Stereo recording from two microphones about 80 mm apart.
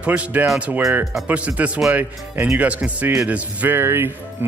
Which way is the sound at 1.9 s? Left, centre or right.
Right.